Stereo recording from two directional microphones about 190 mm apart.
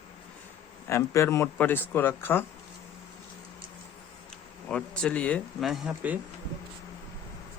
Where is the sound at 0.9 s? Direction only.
15° left (ahead or behind).